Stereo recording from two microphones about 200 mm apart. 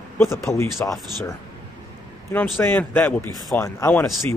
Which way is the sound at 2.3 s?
Centre (ahead or behind).